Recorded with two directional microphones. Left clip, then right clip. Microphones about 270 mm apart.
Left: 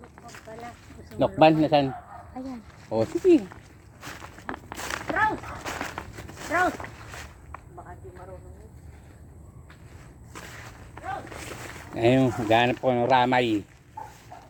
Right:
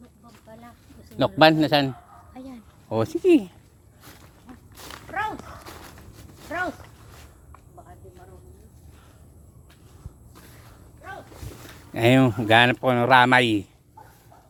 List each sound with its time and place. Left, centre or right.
1.2 s speech: right
2.9 s speech: right
4.8 s a sound: left
6.5 s speech: centre
10.3 s a sound: left
11.9 s speech: right